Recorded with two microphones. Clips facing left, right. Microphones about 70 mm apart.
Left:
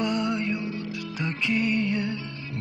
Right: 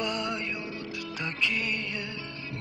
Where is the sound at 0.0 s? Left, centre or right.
Centre.